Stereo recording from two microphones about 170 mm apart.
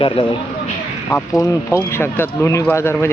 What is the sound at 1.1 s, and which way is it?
Speech, 10° left (ahead or behind).